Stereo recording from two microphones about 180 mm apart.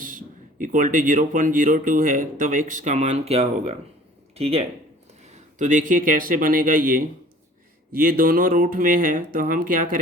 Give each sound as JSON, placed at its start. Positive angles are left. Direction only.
{"t": 0.0, "sound": "a man's voice", "side_deg": -50}